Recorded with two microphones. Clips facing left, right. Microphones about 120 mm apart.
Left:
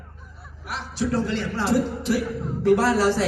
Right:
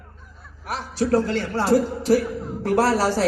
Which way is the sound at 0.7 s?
45° right (ahead or behind).